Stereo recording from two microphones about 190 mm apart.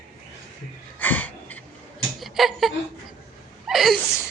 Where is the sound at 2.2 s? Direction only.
Centre (ahead or behind).